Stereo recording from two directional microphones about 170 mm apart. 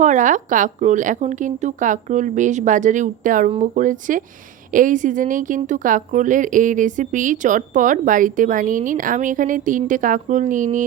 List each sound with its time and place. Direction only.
0.0 s speech: 45° right (ahead or behind)